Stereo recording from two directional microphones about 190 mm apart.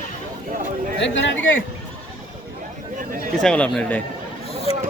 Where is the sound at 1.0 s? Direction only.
70° left (ahead or behind).